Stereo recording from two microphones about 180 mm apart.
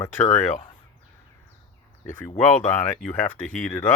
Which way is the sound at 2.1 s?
40° left (ahead or behind).